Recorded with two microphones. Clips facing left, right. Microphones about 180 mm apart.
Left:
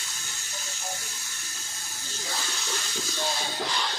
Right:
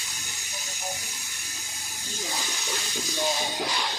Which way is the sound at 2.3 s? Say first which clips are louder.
Even; 15° right (ahead or behind).